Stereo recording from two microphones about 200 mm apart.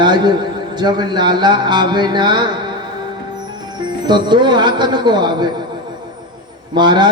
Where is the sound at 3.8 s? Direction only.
20° right (ahead or behind).